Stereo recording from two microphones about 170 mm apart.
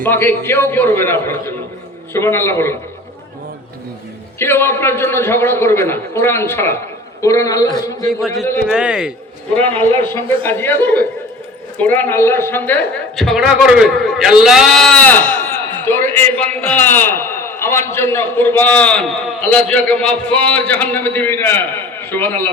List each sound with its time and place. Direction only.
0.0 s a man's voice: 10° left (ahead or behind)
4.4 s a man's voice: 15° left (ahead or behind)
8.6 s a man's voice: 5° right (ahead or behind)
9.8 s a man's voice: 10° left (ahead or behind)
13.1 s a man's voice: centre (ahead or behind)